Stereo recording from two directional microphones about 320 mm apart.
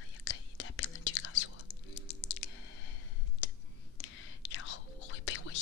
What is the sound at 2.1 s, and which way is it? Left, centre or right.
Typing, left.